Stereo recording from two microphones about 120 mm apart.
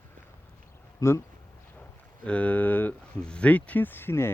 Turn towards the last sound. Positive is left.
turn(degrees=20)  # may be behind; listen again after turning